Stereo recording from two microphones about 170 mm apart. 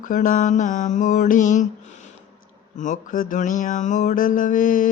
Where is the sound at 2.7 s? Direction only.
50° left (ahead or behind).